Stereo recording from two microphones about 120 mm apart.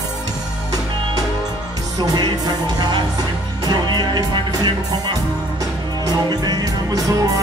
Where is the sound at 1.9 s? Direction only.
35° right (ahead or behind).